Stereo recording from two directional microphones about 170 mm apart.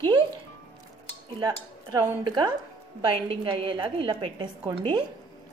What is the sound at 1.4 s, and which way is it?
A woman's voice, 20° right (ahead or behind).